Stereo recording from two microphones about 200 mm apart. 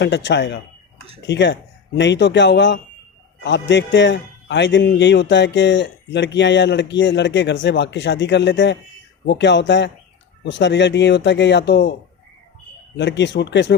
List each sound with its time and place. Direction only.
0.0 s a man's voice: 60° left (ahead or behind)
13.0 s a man's voice: 60° left (ahead or behind)